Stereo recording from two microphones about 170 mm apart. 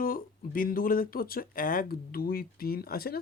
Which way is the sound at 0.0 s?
55° left (ahead or behind).